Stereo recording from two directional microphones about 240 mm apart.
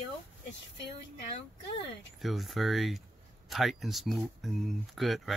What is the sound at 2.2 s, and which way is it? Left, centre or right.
Speech, centre.